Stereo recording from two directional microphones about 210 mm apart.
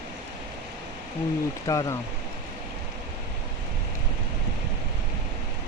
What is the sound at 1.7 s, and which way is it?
Speech, 15° left (ahead or behind).